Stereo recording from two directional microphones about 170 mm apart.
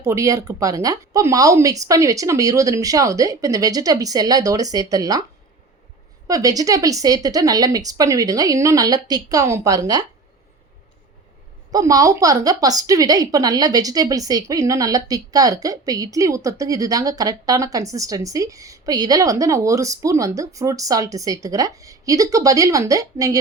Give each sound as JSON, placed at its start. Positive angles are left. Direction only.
{"t": 0.0, "sound": "a woman's voice", "side_deg": -20}
{"t": 6.2, "sound": "a woman's voice", "side_deg": -20}
{"t": 11.7, "sound": "a woman's voice", "side_deg": -20}